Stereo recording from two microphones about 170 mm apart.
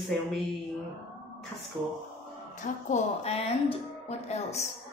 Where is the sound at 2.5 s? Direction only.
40° left (ahead or behind).